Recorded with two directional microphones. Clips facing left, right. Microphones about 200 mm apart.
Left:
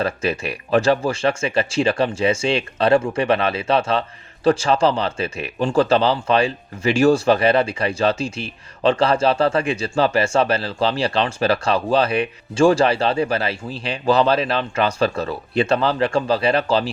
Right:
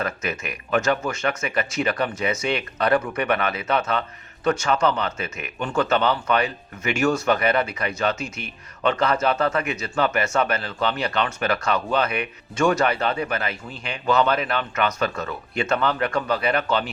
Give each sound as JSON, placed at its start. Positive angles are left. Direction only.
{"t": 0.0, "sound": "speech", "side_deg": 30}